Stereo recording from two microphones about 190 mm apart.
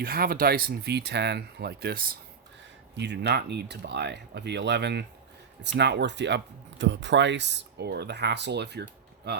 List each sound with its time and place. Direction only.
0.0 s speech: 50° right (ahead or behind)
2.9 s speech: 65° right (ahead or behind)